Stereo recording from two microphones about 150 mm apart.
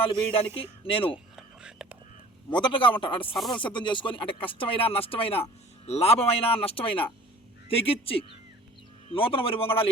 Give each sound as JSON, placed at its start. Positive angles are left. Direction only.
{"t": 0.0, "sound": "speech", "side_deg": 35}
{"t": 1.4, "sound": "whispering", "side_deg": -5}
{"t": 2.5, "sound": "speech", "side_deg": 30}